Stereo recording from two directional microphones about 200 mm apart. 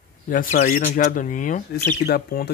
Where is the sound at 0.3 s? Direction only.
45° left (ahead or behind).